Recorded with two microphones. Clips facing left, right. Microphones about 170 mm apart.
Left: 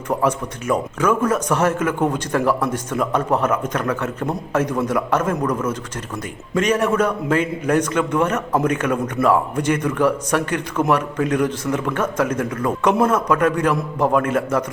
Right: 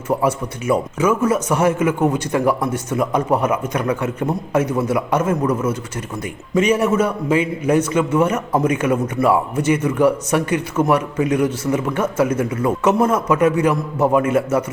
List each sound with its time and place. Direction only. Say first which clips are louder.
0.1 s a man's voice: right 1 dB; 10° right (ahead or behind)